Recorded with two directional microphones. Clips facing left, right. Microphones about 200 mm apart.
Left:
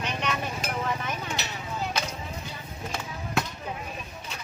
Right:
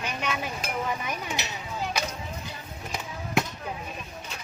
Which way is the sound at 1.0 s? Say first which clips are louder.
Even; 15° right (ahead or behind).